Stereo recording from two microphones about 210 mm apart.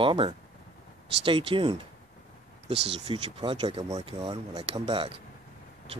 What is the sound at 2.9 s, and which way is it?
Speech, 25° right (ahead or behind).